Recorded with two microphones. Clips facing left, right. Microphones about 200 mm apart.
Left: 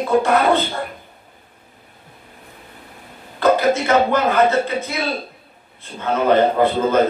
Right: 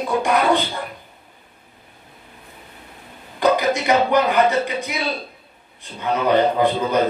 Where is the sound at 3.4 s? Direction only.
15° right (ahead or behind).